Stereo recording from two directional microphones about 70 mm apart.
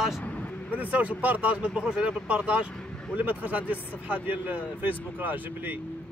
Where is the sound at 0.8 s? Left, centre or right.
Right.